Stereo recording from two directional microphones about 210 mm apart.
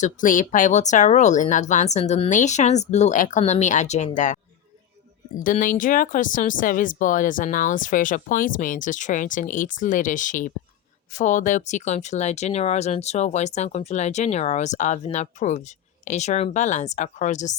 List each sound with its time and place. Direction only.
0.0 s speech: 40° left (ahead or behind)
5.4 s speech: 40° left (ahead or behind)